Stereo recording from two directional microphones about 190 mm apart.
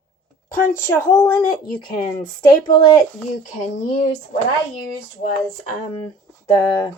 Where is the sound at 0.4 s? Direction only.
20° left (ahead or behind).